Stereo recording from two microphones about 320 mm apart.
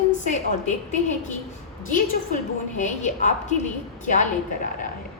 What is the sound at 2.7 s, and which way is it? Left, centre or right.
Speech, left.